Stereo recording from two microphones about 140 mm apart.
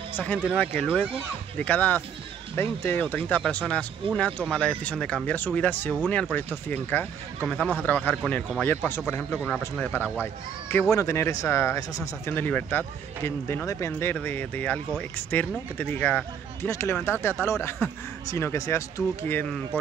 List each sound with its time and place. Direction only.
0.1 s speech: 10° left (ahead or behind)
1.6 s speech: 10° left (ahead or behind)